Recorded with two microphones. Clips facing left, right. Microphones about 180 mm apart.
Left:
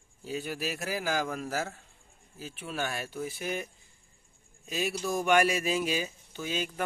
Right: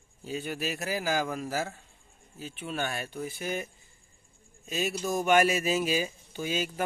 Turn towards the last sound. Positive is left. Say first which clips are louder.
# right 2 dB
turn(degrees=-10)  # may be behind; listen again after turning